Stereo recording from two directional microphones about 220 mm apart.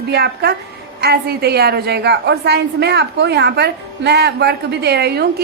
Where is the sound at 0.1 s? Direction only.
45° right (ahead or behind).